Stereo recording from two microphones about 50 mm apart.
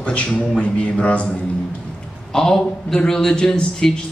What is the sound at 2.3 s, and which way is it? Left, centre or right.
A man's voice, centre.